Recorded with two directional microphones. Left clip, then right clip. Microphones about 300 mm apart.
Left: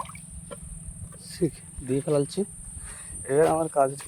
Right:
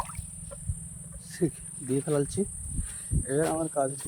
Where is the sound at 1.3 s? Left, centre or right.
Centre.